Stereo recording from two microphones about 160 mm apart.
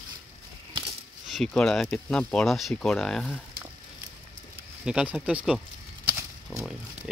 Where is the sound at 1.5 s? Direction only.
5° left (ahead or behind).